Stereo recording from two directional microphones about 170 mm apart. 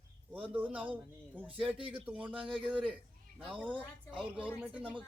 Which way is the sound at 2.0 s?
5° right (ahead or behind).